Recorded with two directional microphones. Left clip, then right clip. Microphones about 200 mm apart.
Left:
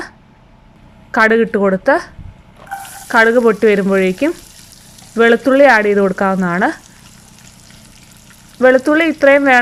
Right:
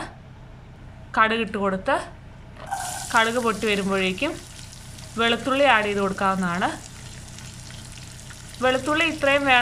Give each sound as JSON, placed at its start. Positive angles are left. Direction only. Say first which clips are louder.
{"t": 1.1, "sound": "speech", "louder": "left 9 dB", "side_deg": 30}
{"t": 3.1, "sound": "speech", "louder": "left 11 dB", "side_deg": 30}
{"t": 8.6, "sound": "speech", "louder": "left 11 dB", "side_deg": 30}